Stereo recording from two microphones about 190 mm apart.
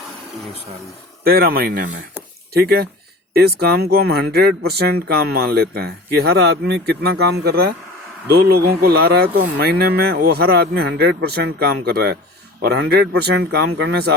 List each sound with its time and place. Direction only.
1.2 s speech: 55° right (ahead or behind)